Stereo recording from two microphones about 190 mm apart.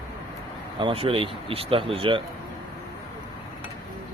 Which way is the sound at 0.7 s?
30° right (ahead or behind).